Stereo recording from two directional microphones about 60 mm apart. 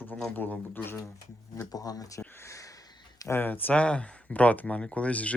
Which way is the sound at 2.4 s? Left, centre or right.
Left.